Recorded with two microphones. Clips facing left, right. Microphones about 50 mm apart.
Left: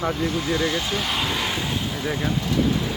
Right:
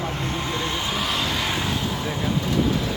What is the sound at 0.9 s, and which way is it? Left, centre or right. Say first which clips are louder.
Speech: even; centre.